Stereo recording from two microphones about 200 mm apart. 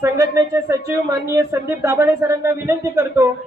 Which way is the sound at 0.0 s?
15° right (ahead or behind).